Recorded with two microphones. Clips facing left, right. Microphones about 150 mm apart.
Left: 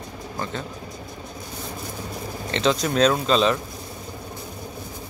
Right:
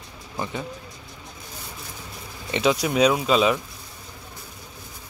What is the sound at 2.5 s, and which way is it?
Speech, 10° right (ahead or behind).